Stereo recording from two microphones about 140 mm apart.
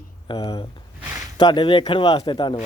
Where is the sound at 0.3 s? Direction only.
40° left (ahead or behind).